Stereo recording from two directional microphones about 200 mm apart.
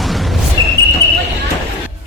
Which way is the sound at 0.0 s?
Centre (ahead or behind).